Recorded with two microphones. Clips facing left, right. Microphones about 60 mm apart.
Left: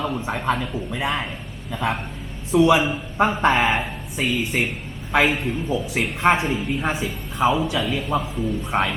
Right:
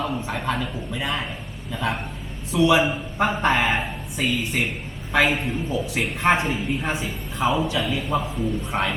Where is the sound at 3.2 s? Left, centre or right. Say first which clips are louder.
Left 3 dB; centre.